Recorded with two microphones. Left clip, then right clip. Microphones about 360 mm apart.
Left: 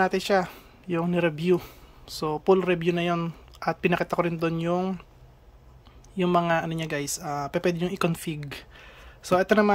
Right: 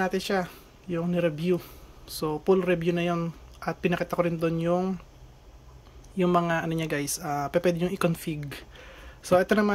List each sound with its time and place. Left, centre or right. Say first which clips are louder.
0.0 s speech: left 4 dB; centre
6.1 s speech: left 1 dB; centre